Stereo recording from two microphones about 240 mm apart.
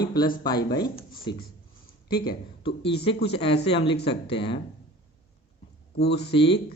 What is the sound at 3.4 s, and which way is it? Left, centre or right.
Speech, left.